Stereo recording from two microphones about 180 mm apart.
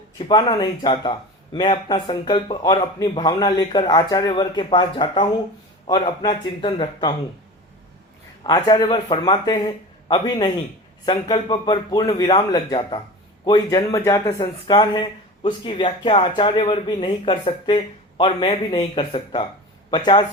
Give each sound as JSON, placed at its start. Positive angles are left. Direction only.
{"t": 0.2, "sound": "speech", "side_deg": 30}
{"t": 8.4, "sound": "speech", "side_deg": 25}